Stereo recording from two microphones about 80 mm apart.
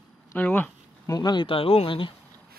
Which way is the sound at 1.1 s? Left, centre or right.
Left.